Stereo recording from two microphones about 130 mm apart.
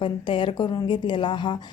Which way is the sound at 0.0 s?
40° left (ahead or behind).